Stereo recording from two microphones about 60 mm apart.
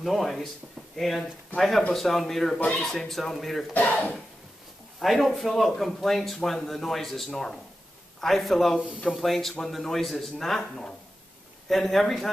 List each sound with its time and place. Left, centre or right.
0.0 s speech: centre
3.7 s speech: left
5.0 s speech: centre